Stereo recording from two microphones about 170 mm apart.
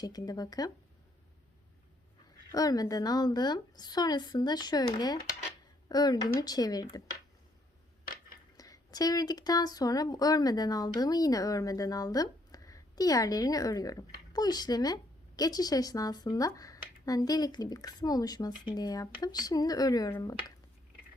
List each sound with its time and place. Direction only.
0.0 s speech: 20° left (ahead or behind)
2.5 s speech: 20° left (ahead or behind)
8.5 s speech: 20° left (ahead or behind)